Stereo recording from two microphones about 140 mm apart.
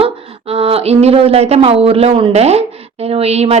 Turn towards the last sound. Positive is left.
turn(degrees=-50)  # may be behind; listen again after turning